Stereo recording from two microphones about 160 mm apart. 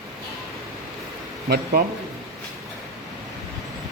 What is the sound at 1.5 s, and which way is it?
Speech, 75° right (ahead or behind).